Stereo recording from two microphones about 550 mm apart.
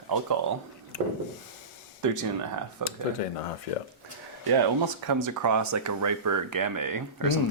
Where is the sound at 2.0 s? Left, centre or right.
Right.